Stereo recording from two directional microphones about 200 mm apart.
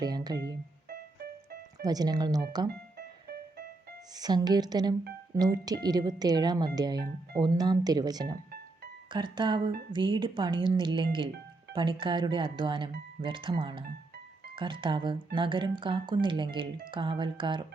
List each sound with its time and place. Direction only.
0.0 s speech: 20° right (ahead or behind)
0.3 s music: 55° right (ahead or behind)
1.8 s speech: 20° right (ahead or behind)
4.1 s speech: 20° right (ahead or behind)